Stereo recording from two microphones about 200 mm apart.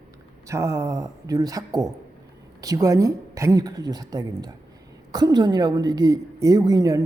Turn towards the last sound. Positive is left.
turn(degrees=-20)  # may be behind; listen again after turning